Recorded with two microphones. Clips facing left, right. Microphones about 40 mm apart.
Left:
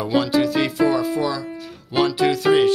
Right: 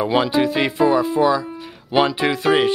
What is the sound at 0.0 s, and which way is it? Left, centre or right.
Speech, right.